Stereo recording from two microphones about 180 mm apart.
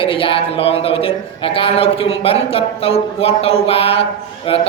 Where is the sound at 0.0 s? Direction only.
30° left (ahead or behind).